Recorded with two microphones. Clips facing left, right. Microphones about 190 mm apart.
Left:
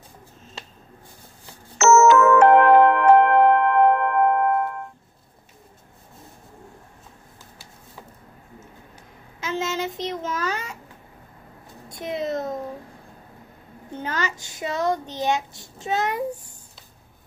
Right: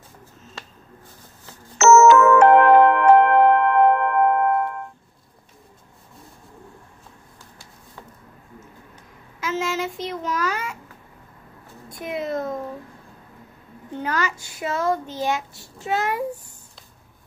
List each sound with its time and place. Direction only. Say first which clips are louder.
1.8 s music: right 2 dB; 65° right (ahead or behind)
9.4 s child singing: right 1 dB; 25° left (ahead or behind)
11.9 s a sound: even; 25° left (ahead or behind)
14.0 s child singing: right 2 dB; 25° left (ahead or behind)